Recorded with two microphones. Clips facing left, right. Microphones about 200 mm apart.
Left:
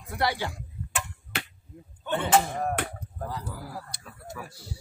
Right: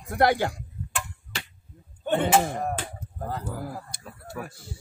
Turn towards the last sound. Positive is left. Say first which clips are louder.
# right 3 dB
turn(degrees=-50)  # may be behind; listen again after turning